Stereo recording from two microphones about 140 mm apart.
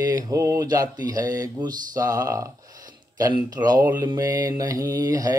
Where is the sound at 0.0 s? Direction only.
25° right (ahead or behind).